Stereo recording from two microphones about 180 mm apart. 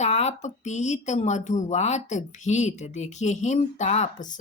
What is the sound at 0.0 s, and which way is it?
Speech, 40° left (ahead or behind).